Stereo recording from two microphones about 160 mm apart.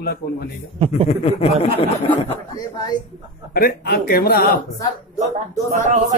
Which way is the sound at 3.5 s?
70° left (ahead or behind).